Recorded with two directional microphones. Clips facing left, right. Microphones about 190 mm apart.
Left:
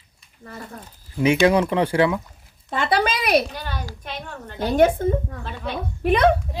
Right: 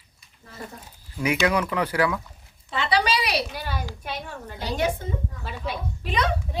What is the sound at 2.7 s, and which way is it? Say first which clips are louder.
Speech: left 2 dB; 50° left (ahead or behind).